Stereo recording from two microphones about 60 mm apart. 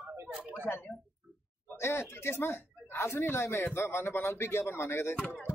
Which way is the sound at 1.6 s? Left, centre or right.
Left.